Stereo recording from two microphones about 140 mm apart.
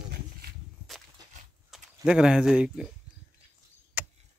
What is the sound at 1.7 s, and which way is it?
Speech, 5° right (ahead or behind).